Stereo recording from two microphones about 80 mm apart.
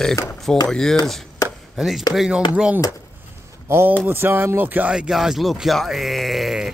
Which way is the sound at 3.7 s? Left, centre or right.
Right.